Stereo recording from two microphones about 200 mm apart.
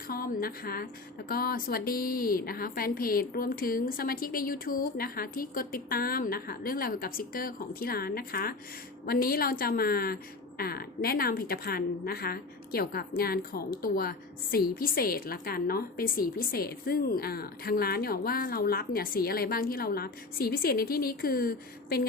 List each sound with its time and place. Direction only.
0.1 s a woman's voice: 50° left (ahead or behind)